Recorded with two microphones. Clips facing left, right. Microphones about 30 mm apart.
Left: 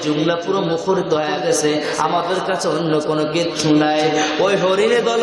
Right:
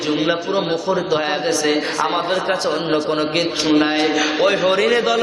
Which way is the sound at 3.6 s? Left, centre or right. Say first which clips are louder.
Left 2 dB; centre.